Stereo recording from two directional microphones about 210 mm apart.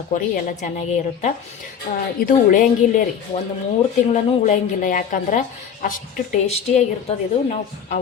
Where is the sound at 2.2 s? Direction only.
40° left (ahead or behind).